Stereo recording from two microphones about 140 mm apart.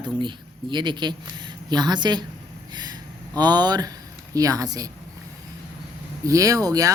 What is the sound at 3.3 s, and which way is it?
Speech, 30° right (ahead or behind).